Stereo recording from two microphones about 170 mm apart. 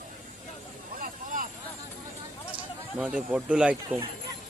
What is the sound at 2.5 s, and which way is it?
Speech, 5° right (ahead or behind).